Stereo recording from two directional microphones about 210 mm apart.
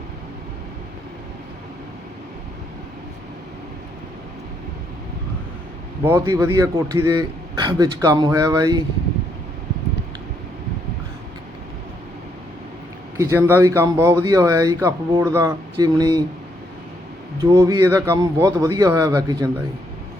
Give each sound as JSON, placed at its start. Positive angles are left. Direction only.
{"t": 6.1, "sound": "speech", "side_deg": -15}
{"t": 13.1, "sound": "speech", "side_deg": -15}
{"t": 17.5, "sound": "speech", "side_deg": -15}